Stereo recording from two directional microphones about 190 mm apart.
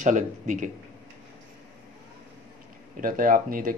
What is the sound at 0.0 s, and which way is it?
Speech, 40° right (ahead or behind).